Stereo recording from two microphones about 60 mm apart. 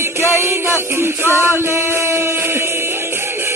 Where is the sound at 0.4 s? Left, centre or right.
Right.